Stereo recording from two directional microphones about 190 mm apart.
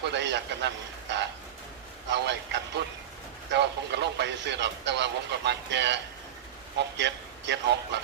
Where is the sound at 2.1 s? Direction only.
65° right (ahead or behind).